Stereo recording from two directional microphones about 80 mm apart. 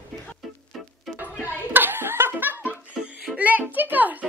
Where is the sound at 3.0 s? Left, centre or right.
Centre.